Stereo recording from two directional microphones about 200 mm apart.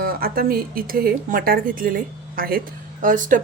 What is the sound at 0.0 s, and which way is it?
A woman's voice, 50° right (ahead or behind).